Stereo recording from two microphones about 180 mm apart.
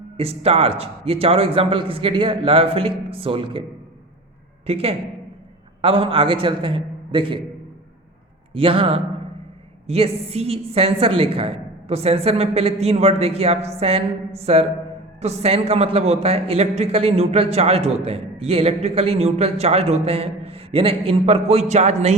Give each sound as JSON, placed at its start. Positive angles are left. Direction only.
{"t": 0.2, "sound": "a man's voice", "side_deg": -35}
{"t": 4.6, "sound": "a man's voice", "side_deg": -35}
{"t": 8.5, "sound": "a man's voice", "side_deg": -30}